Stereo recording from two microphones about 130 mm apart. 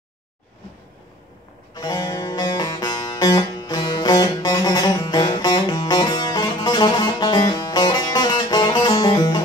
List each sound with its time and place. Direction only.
1.8 s music: 30° left (ahead or behind)